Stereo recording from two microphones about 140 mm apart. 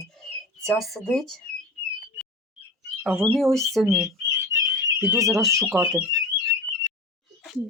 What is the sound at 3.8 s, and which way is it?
Speech, 25° right (ahead or behind).